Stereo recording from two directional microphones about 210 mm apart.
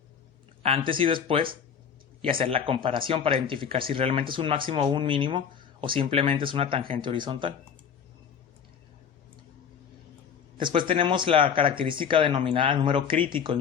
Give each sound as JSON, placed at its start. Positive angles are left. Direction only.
{"t": 0.6, "sound": "speech", "side_deg": -25}
{"t": 10.6, "sound": "speech", "side_deg": -25}